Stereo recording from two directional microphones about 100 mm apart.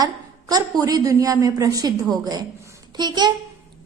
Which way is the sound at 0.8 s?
35° right (ahead or behind).